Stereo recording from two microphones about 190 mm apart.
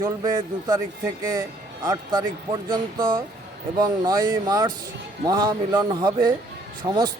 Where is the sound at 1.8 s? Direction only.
20° right (ahead or behind).